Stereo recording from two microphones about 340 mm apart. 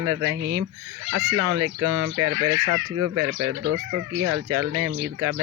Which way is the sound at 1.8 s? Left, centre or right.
Right.